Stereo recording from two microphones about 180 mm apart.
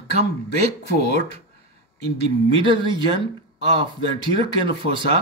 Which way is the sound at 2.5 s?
25° right (ahead or behind).